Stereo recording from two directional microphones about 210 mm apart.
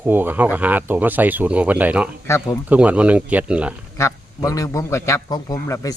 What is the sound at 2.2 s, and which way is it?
Speech, 15° left (ahead or behind).